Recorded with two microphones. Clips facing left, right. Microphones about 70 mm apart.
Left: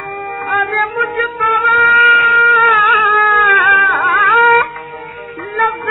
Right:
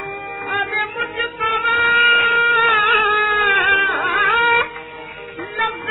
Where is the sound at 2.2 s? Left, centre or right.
Left.